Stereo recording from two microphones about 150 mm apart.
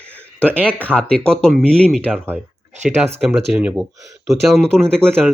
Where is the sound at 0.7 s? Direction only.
10° left (ahead or behind).